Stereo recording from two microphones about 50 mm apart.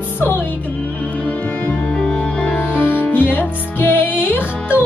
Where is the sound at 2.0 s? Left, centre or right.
Centre.